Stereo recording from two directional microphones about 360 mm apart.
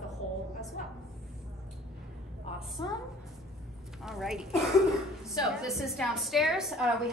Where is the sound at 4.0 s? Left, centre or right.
Centre.